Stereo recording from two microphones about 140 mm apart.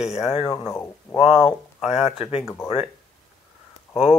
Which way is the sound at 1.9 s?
45° left (ahead or behind).